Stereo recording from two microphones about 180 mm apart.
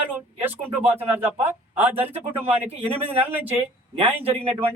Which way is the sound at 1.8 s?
10° right (ahead or behind).